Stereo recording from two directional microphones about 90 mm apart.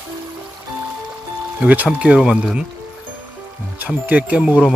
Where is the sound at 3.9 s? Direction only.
15° right (ahead or behind).